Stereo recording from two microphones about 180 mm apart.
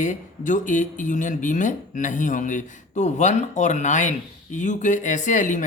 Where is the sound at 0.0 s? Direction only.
45° left (ahead or behind).